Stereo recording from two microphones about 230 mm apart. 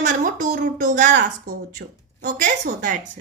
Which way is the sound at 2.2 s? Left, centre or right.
Right.